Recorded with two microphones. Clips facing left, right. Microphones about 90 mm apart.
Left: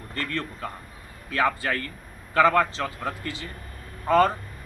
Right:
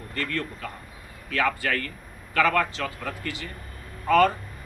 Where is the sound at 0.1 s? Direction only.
25° left (ahead or behind).